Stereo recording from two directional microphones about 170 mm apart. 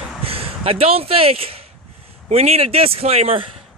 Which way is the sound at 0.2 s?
35° right (ahead or behind).